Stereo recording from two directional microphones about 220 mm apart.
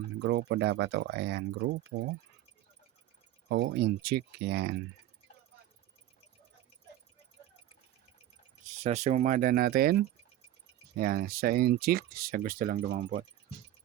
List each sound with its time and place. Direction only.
0.2 s speech: 50° right (ahead or behind)
3.5 s speech: 55° right (ahead or behind)
8.8 s speech: 30° right (ahead or behind)